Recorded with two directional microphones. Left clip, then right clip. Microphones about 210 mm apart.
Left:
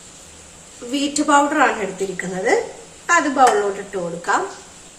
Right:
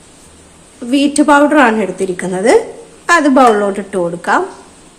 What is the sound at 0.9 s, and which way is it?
Speech, 40° right (ahead or behind).